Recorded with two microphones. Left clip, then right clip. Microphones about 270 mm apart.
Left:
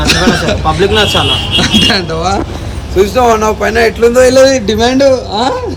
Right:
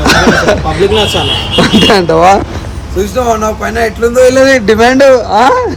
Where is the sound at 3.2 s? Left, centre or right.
Centre.